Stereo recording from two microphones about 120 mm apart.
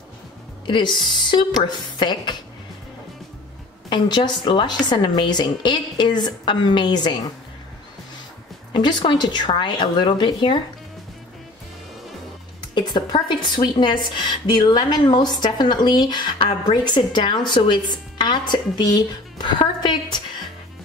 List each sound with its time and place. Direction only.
0.7 s a woman's voice: 40° left (ahead or behind)
3.9 s a woman's voice: 40° left (ahead or behind)
8.7 s a woman's voice: 40° left (ahead or behind)
12.7 s a woman's voice: 40° left (ahead or behind)